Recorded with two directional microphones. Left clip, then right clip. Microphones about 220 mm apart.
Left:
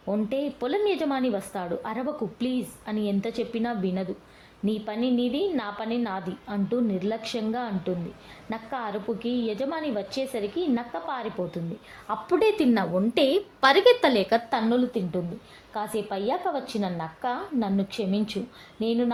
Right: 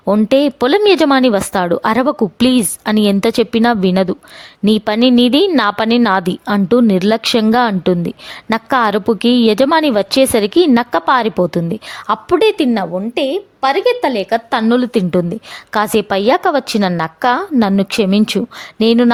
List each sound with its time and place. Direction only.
0.0 s a woman's voice: 50° right (ahead or behind); by 14.6 s 30° right (ahead or behind)
14.7 s speech: 45° right (ahead or behind)